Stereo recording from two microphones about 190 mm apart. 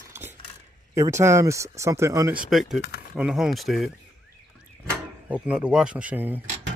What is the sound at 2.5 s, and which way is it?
Speech, centre (ahead or behind).